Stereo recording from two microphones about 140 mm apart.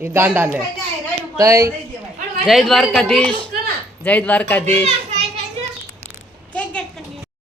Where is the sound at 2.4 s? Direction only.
Centre (ahead or behind).